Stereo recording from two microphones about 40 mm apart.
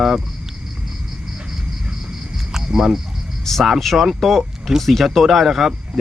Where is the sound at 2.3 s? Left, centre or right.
Centre.